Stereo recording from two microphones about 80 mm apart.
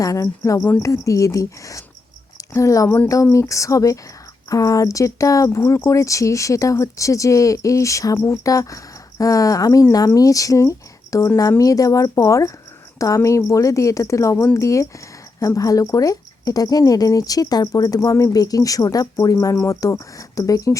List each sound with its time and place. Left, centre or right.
0.0 s speech: left